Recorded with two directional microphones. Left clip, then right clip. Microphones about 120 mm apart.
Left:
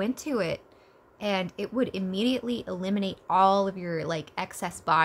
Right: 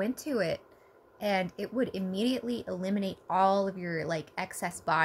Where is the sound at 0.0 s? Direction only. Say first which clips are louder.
Left 2 dB; 25° left (ahead or behind).